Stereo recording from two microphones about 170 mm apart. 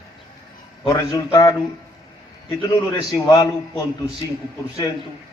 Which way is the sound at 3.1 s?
25° left (ahead or behind).